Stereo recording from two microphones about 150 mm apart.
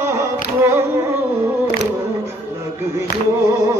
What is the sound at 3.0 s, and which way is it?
Music, 20° right (ahead or behind).